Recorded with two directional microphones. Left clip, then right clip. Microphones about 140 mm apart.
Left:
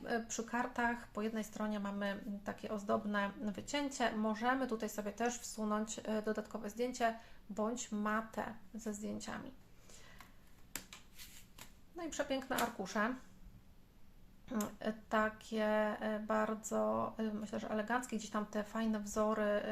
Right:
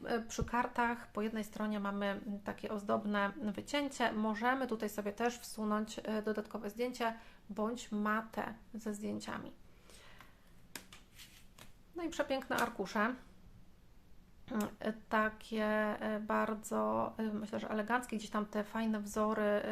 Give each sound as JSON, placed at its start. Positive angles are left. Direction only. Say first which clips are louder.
{"t": 0.0, "sound": "speech", "louder": "right 1 dB", "side_deg": -35}
{"t": 11.9, "sound": "speech", "louder": "right 3 dB", "side_deg": -35}
{"t": 14.4, "sound": "speech", "louder": "right 2 dB", "side_deg": -35}